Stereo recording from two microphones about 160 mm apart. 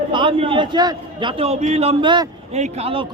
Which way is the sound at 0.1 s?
30° right (ahead or behind).